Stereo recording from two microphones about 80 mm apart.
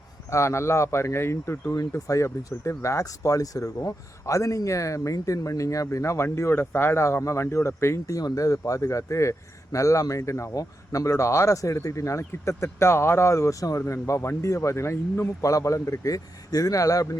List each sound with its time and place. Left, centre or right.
0.3 s speech: left
15.4 s speech: left